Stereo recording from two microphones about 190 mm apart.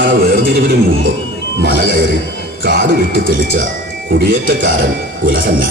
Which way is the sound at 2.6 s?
60° right (ahead or behind).